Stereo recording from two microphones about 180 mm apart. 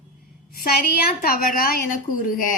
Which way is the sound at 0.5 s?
55° left (ahead or behind).